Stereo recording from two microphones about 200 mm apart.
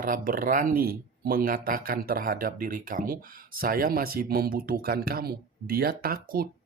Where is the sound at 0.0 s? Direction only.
45° right (ahead or behind).